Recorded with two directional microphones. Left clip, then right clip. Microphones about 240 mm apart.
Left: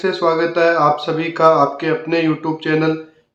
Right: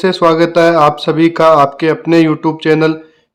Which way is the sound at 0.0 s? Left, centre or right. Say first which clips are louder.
Right 6 dB; right.